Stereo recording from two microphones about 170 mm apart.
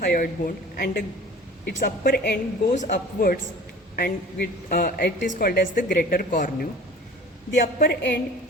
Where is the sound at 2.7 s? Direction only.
50° left (ahead or behind).